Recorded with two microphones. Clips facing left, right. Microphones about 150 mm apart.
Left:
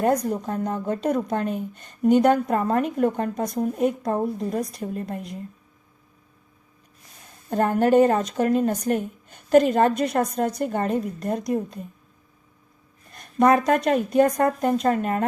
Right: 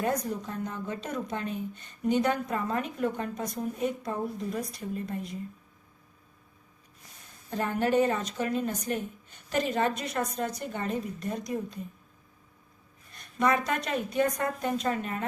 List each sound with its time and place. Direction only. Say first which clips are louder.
0.0 s speech: left 8 dB; 50° left (ahead or behind)
3.6 s speech: left 8 dB; 55° left (ahead or behind)
7.5 s speech: left 8 dB; 50° left (ahead or behind)
13.1 s speech: left 8 dB; 50° left (ahead or behind)